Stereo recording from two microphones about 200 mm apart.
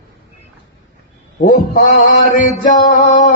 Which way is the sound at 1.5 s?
40° left (ahead or behind).